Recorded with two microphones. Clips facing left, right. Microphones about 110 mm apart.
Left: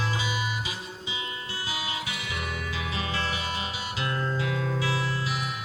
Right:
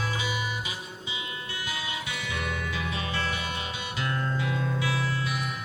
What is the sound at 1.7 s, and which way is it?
Music, 15° left (ahead or behind).